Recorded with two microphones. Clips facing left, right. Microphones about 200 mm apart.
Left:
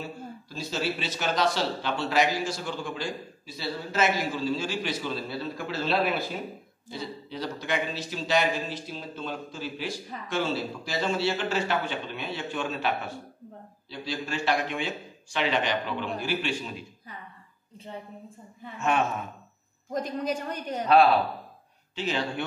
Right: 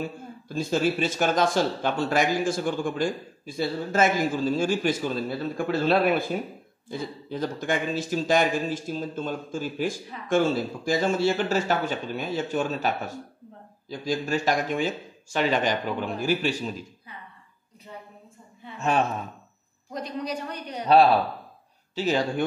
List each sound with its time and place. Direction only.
0.5 s a man's voice: 50° right (ahead or behind)
18.8 s speech: 35° right (ahead or behind)
19.9 s a man's voice: 50° left (ahead or behind)
21.9 s speech: 40° right (ahead or behind)